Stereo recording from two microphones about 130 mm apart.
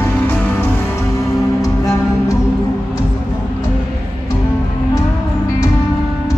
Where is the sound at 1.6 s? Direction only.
25° left (ahead or behind).